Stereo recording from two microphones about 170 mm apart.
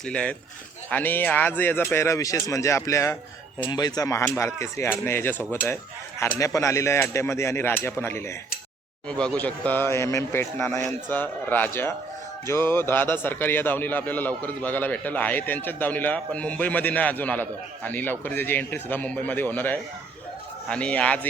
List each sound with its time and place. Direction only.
0.0 s a man's voice: 5° left (ahead or behind)